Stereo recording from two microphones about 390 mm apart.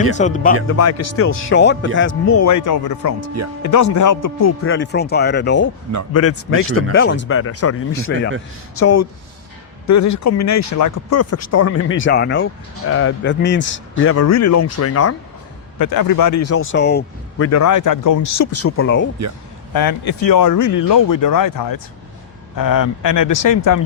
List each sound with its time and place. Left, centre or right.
0.2 s speech: centre
0.8 s a man's voice: left
6.2 s speech: left
15.8 s a man's voice: left
19.7 s a man's voice: left